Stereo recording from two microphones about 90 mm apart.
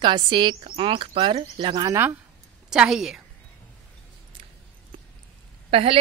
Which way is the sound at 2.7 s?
5° right (ahead or behind).